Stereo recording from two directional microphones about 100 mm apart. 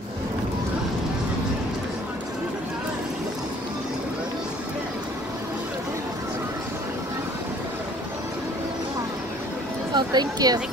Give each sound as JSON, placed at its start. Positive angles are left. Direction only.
{"t": 9.9, "sound": "speech", "side_deg": -45}